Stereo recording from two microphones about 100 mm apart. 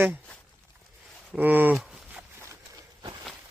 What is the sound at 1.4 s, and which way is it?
Speech, 15° right (ahead or behind).